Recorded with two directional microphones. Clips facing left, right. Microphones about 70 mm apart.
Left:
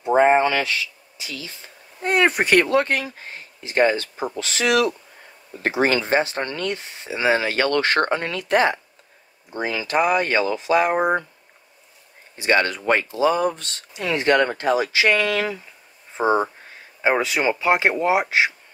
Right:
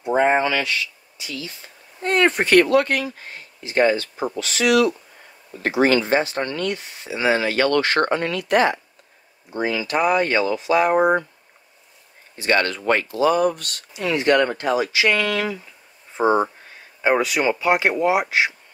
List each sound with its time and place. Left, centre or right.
0.1 s a sound: left
2.0 s speech: centre; by 10.8 s left
12.4 s speech: centre
16.2 s speech: right
17.2 s speech: left